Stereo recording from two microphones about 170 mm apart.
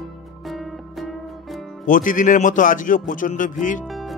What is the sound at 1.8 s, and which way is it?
Speech, 55° left (ahead or behind).